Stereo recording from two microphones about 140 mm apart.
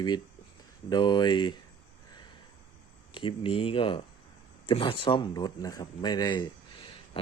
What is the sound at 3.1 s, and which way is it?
Speech, 35° left (ahead or behind).